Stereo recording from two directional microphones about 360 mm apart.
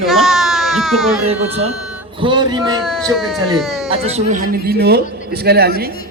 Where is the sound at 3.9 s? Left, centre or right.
Centre.